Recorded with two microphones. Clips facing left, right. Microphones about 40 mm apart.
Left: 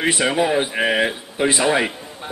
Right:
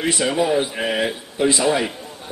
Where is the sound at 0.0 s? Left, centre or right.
Left.